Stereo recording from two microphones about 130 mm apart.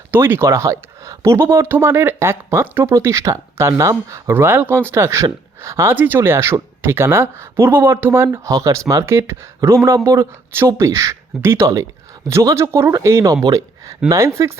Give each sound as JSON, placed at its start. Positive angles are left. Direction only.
{"t": 0.1, "sound": "speech", "side_deg": -20}